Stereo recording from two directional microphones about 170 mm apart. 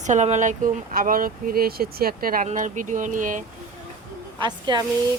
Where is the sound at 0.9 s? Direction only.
55° right (ahead or behind).